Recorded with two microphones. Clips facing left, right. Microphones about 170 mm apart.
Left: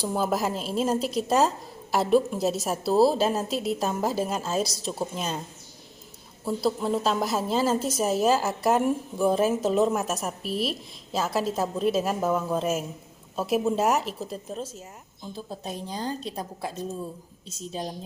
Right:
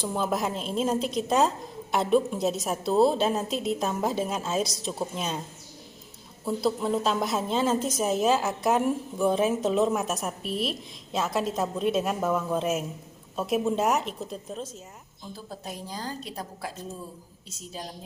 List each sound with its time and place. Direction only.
0.0 s a woman's voice: 5° left (ahead or behind)
6.4 s a woman's voice: centre (ahead or behind)
15.4 s a woman's voice: 25° left (ahead or behind)